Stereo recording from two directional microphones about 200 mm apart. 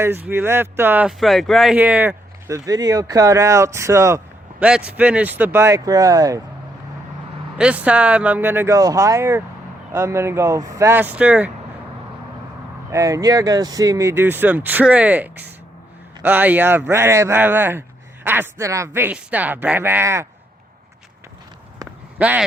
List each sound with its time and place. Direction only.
0.0 s speech: 10° right (ahead or behind)
7.6 s speech: 5° right (ahead or behind)
12.9 s speech: 15° right (ahead or behind)
22.2 s speech: 5° right (ahead or behind)